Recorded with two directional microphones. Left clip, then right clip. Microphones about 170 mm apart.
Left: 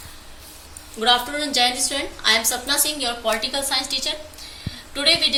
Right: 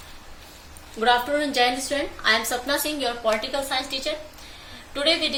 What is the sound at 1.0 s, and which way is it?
A woman's voice, 55° right (ahead or behind).